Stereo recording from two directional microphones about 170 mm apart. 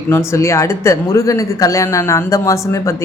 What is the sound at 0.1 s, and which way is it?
Speech, 15° left (ahead or behind).